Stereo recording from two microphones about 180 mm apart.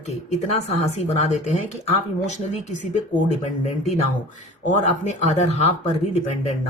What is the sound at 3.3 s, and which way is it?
Speech, 40° left (ahead or behind).